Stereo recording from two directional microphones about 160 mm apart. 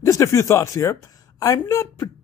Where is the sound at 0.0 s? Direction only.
20° left (ahead or behind).